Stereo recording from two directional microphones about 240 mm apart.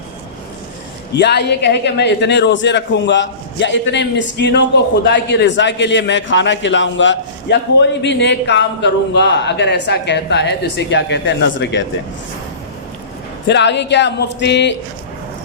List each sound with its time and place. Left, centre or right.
1.1 s a man's voice: left
13.5 s a man's voice: left